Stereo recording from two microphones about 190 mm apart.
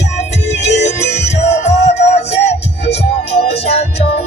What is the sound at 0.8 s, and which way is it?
Music, 35° left (ahead or behind).